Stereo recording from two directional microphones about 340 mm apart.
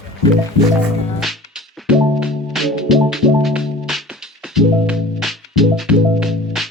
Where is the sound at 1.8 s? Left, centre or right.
Centre.